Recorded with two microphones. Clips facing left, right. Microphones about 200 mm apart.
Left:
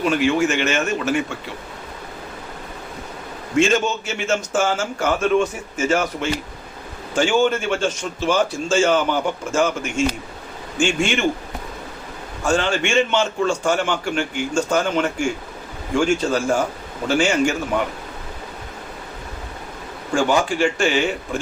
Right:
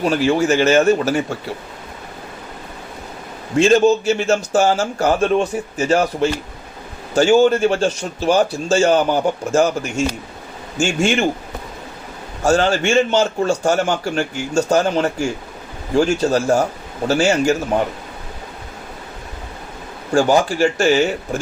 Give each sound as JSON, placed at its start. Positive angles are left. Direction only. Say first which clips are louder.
{"t": 0.0, "sound": "a man's voice", "louder": "right 2 dB", "side_deg": -35}
{"t": 3.6, "sound": "a man's voice", "louder": "right 6 dB", "side_deg": -35}
{"t": 12.5, "sound": "a man's voice", "louder": "right 4 dB", "side_deg": -40}
{"t": 20.1, "sound": "a man's voice", "louder": "right 4 dB", "side_deg": -40}